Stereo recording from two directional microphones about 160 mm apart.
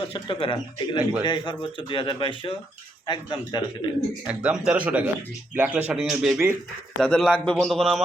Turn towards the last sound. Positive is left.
turn(degrees=0)  # may be behind; listen again after turning